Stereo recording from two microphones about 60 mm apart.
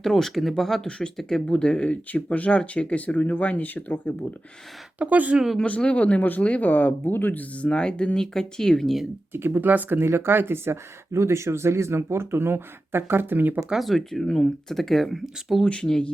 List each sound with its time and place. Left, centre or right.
0.0 s speech: centre; by 4.1 s left
4.9 s speech: right
5.6 s speech: left
7.6 s speech: centre
9.3 s speech: right
10.0 s speech: right
13.7 s speech: centre
15.6 s speech: centre